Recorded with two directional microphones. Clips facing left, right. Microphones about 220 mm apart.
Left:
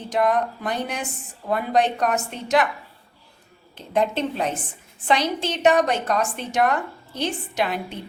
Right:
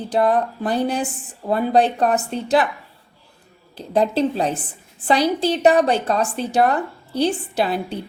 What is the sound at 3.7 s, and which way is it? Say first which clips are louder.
A woman's voice: right 4 dB; 35° right (ahead or behind).